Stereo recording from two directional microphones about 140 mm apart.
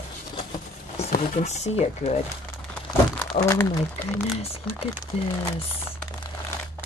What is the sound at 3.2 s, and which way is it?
Crumpling, 20° left (ahead or behind).